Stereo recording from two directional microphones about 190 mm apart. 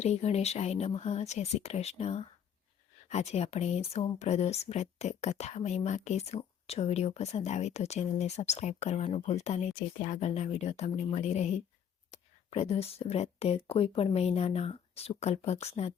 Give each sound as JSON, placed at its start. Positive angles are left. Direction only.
{"t": 0.0, "sound": "speech", "side_deg": 35}